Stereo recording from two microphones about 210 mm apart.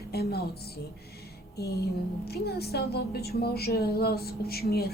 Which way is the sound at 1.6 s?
50° left (ahead or behind).